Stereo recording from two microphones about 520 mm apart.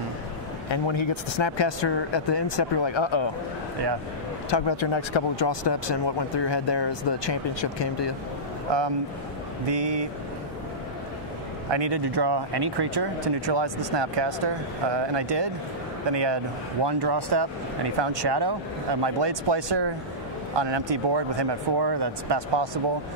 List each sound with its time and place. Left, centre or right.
0.7 s speech: left
4.5 s speech: left
8.7 s speech: right
11.7 s speech: right